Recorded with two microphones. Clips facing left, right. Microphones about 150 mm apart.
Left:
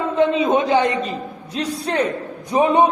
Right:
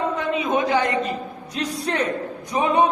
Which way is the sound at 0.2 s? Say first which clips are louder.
Left 6 dB; 25° left (ahead or behind).